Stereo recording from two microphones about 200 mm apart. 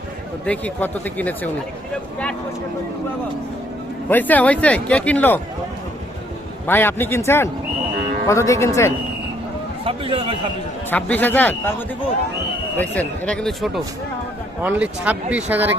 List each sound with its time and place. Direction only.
0.4 s speech: 5° left (ahead or behind)
4.1 s speech: 10° left (ahead or behind)
6.7 s speech: 10° left (ahead or behind)
9.8 s a man's voice: 25° right (ahead or behind)
10.9 s speech: 10° left (ahead or behind)
12.7 s speech: 10° left (ahead or behind); by 15.8 s 10° right (ahead or behind)